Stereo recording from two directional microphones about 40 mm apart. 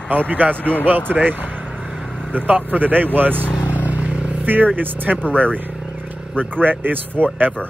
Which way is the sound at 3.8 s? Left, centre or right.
Right.